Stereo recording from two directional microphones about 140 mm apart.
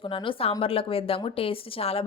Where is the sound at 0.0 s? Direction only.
35° left (ahead or behind).